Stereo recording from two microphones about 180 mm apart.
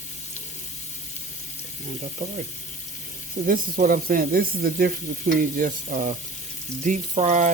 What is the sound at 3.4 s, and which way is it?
Speech, 50° right (ahead or behind).